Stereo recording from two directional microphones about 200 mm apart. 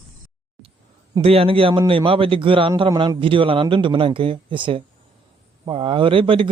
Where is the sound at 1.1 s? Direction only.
30° right (ahead or behind).